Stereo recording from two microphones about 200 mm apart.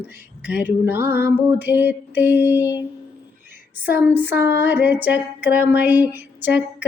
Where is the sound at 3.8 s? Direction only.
10° right (ahead or behind).